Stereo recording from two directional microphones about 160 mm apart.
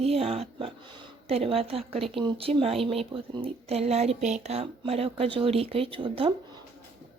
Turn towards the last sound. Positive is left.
turn(degrees=-35)  # may be behind; listen again after turning